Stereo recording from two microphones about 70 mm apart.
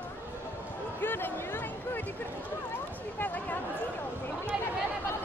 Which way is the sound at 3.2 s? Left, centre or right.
Left.